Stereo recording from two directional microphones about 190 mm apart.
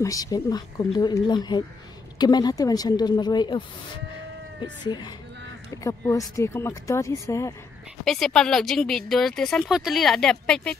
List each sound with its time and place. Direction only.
0.0 s a woman's voice: 20° left (ahead or behind)
4.8 s a woman's voice: 20° left (ahead or behind)
8.0 s a woman's voice: 5° left (ahead or behind)